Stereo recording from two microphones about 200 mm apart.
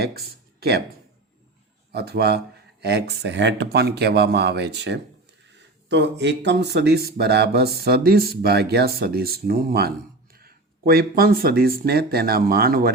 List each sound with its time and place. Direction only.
1.9 s speech: 55° right (ahead or behind)